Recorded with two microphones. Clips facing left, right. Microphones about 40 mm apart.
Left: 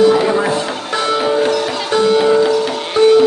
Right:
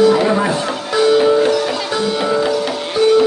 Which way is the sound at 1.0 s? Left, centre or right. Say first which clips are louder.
Right 3 dB; left.